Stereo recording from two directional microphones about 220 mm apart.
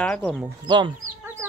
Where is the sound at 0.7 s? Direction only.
20° right (ahead or behind).